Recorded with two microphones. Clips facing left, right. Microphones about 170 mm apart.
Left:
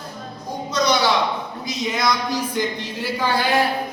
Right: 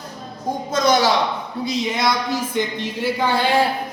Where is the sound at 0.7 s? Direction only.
50° right (ahead or behind).